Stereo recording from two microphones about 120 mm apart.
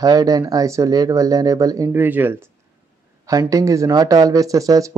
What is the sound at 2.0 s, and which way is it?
Speech, 15° right (ahead or behind).